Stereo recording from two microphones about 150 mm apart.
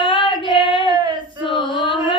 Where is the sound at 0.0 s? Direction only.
35° left (ahead or behind).